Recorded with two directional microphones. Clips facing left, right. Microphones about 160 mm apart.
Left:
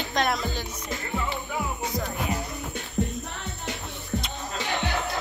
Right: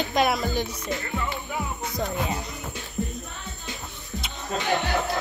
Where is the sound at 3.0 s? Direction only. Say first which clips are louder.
Left 3 dB; 75° left (ahead or behind).